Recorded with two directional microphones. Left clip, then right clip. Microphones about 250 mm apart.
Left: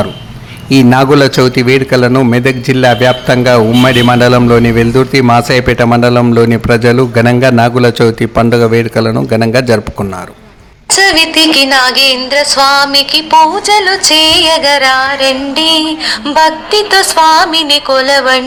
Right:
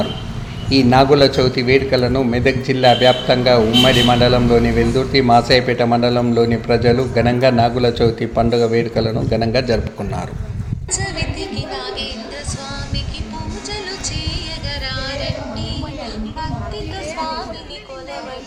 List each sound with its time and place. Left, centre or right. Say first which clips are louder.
0.7 s a man's voice: left 5 dB; left
10.9 s music: left 18 dB; left